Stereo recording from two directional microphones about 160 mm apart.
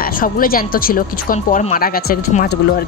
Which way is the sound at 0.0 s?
65° left (ahead or behind).